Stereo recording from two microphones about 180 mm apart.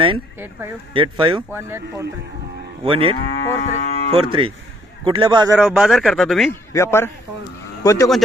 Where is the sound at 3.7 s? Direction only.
35° left (ahead or behind).